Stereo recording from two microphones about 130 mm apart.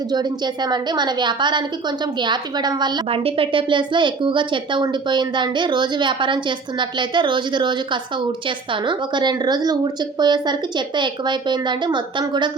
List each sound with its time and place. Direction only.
0.1 s speech: 35° right (ahead or behind)
3.1 s speech: 45° right (ahead or behind)